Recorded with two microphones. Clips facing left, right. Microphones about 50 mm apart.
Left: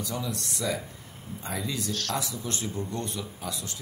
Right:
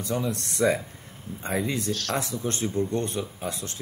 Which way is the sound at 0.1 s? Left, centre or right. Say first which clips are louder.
Right 5 dB; right.